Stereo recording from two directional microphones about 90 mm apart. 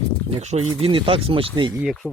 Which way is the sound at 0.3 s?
90° right.